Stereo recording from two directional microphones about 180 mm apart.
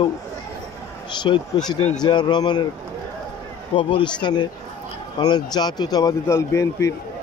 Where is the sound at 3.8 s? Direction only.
30° left (ahead or behind).